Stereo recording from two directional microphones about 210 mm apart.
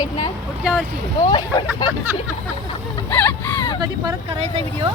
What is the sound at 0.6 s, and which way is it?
Speech, centre (ahead or behind).